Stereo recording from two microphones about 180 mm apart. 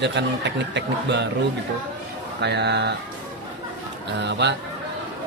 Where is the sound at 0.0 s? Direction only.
75° right (ahead or behind).